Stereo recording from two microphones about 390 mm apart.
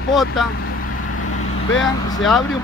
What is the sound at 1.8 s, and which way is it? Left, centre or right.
Speech, centre.